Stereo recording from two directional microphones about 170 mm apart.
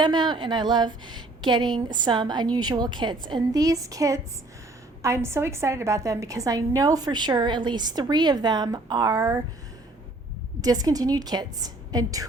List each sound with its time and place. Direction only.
0.0 s a woman's voice: 25° right (ahead or behind)
10.6 s a woman's voice: 20° right (ahead or behind)